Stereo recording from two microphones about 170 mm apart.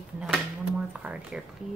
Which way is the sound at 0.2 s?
5° right (ahead or behind).